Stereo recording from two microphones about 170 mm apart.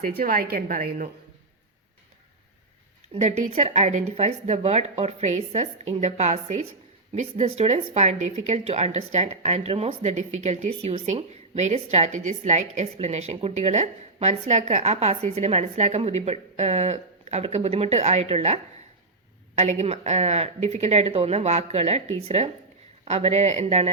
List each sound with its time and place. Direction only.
0.0 s a woman's voice: 55° right (ahead or behind)
3.2 s speech: 40° right (ahead or behind)